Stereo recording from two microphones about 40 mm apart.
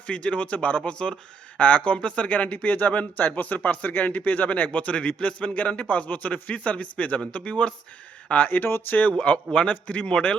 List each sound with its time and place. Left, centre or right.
0.1 s a man's voice: left
0.9 s a man's voice: left
2.6 s a man's voice: left
9.1 s a man's voice: left